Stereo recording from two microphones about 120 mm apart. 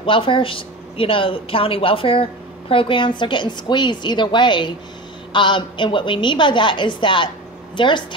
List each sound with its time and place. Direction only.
0.0 s a woman's voice: 45° left (ahead or behind)